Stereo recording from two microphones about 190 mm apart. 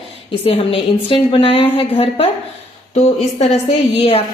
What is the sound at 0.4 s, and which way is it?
A woman's voice, 30° left (ahead or behind).